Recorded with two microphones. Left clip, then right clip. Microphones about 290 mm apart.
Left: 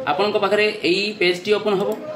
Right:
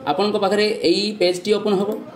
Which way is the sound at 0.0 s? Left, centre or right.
Right.